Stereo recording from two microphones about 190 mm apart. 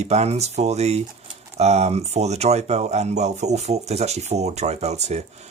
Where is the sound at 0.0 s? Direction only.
35° right (ahead or behind).